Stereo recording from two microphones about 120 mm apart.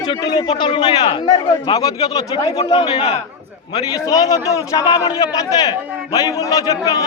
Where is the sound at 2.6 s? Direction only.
45° left (ahead or behind).